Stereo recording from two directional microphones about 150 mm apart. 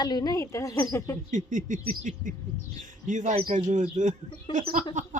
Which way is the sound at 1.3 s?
60° right (ahead or behind).